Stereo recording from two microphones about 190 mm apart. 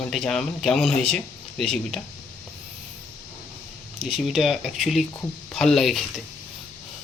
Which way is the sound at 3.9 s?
Centre (ahead or behind).